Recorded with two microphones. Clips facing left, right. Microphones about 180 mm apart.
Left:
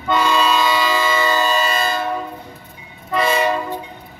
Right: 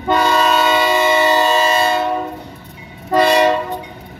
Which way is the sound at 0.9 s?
25° right (ahead or behind).